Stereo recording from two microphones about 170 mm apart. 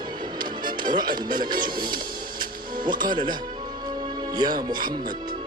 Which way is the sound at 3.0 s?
25° right (ahead or behind).